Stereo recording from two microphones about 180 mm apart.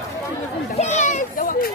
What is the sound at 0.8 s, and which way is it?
Speech, 40° left (ahead or behind).